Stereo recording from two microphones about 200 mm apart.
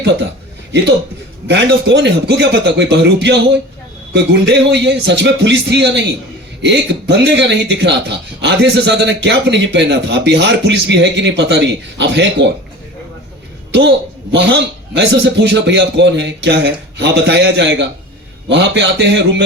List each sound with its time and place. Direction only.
1.5 s speech: 60° right (ahead or behind)
14.3 s speech: 60° right (ahead or behind)